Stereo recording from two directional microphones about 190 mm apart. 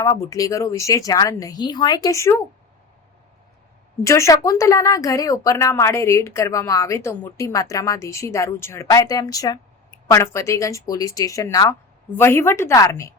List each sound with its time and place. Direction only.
0.0 s a woman's voice: 15° left (ahead or behind)
4.0 s a woman's voice: 15° left (ahead or behind)